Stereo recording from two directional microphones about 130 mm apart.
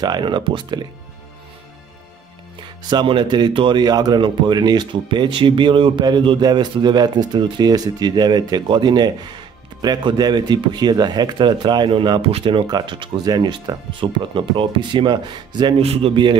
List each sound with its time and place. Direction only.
0.0 s speech: 35° right (ahead or behind)
2.8 s speech: 35° right (ahead or behind)
15.8 s speech: 50° right (ahead or behind)